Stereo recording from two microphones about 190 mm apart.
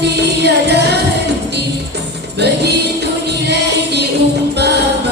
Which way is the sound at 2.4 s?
60° right (ahead or behind).